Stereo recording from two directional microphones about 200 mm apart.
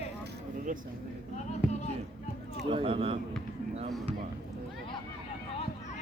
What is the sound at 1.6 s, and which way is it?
Music, 5° right (ahead or behind).